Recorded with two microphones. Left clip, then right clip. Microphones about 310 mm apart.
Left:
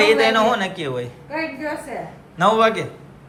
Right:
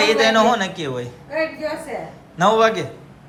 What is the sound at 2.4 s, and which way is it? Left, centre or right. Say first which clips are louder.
Speech: right 1 dB; centre.